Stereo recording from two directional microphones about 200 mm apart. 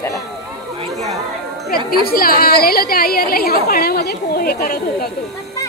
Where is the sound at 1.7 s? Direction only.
50° left (ahead or behind).